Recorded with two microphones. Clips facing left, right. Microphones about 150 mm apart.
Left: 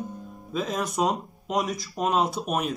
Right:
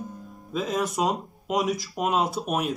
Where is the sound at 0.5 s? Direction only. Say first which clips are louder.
Right 1 dB; centre (ahead or behind).